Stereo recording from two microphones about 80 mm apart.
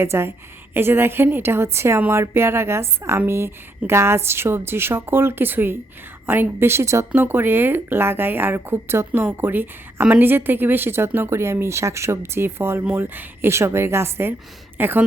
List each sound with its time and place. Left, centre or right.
0.0 s speech: right
7.1 s speech: right